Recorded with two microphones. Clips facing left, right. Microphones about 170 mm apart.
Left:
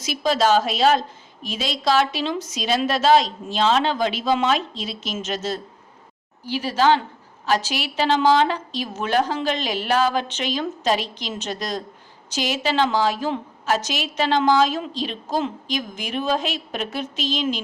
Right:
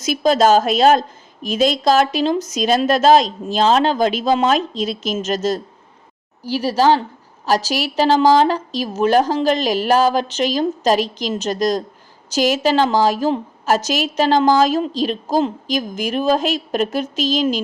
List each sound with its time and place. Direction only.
0.0 s a woman's voice: 45° right (ahead or behind)